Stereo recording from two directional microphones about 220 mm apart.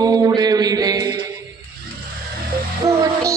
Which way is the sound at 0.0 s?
15° right (ahead or behind).